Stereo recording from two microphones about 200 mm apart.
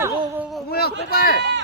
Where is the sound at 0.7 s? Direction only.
50° left (ahead or behind).